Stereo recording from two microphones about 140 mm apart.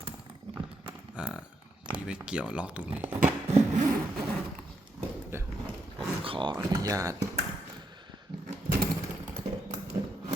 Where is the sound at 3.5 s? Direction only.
50° right (ahead or behind).